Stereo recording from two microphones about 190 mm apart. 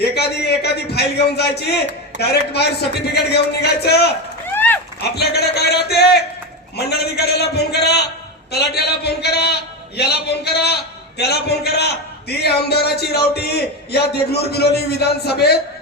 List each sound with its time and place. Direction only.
0.0 s a man's voice: 60° left (ahead or behind)
4.5 s a sound: 10° left (ahead or behind)
5.0 s a man's voice: 60° left (ahead or behind)